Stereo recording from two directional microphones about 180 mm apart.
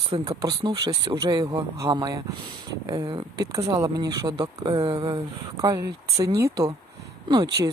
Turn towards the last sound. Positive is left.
turn(degrees=-25)  # may be behind; listen again after turning